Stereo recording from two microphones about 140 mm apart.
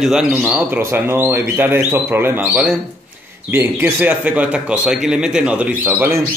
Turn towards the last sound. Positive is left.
turn(degrees=-15)  # may be behind; listen again after turning